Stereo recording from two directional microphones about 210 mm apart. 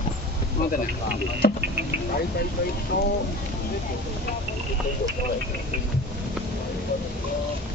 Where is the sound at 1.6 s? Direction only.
55° right (ahead or behind).